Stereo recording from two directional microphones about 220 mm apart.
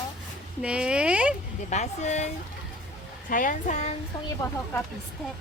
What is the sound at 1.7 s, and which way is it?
Speech, 30° left (ahead or behind).